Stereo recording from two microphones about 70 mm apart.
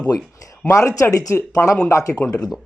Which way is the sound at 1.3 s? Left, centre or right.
Left.